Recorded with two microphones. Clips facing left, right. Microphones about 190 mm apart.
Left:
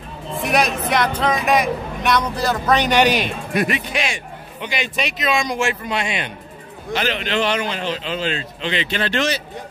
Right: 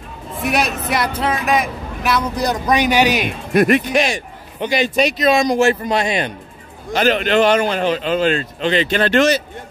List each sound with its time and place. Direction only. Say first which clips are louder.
0.4 s speech: even; centre (ahead or behind)
2.3 s speech: right 1 dB; 15° right (ahead or behind)
3.3 s a man's voice: right 7 dB; 50° right (ahead or behind)